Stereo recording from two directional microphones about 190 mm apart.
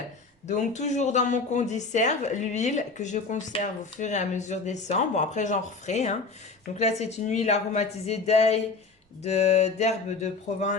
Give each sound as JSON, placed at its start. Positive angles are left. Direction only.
{"t": 0.4, "sound": "speech", "side_deg": 40}